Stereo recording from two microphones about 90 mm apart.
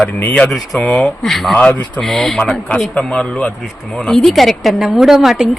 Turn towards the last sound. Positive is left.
turn(degrees=-5)  # may be behind; listen again after turning